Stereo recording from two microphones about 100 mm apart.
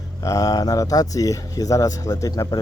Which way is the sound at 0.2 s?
35° left (ahead or behind).